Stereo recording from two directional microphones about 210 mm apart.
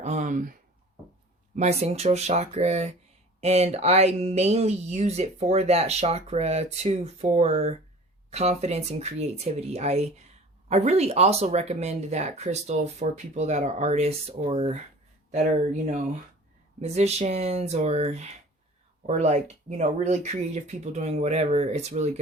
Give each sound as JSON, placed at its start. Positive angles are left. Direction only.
{"t": 0.0, "sound": "speech", "side_deg": -35}
{"t": 1.5, "sound": "speech", "side_deg": -30}